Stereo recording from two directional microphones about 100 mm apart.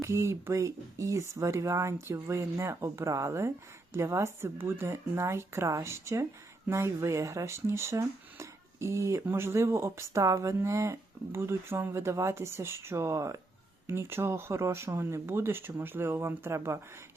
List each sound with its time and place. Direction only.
0.0 s speech: 30° right (ahead or behind)